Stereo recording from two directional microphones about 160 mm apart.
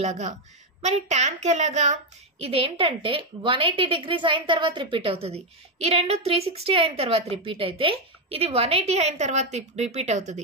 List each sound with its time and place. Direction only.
0.0 s a child's voice: 45° right (ahead or behind)
2.4 s a woman's voice: 35° right (ahead or behind)